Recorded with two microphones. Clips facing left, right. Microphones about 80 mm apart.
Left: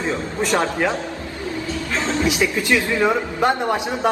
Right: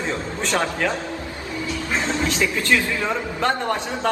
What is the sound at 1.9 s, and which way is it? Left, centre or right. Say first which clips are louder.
Music: left 1 dB; right.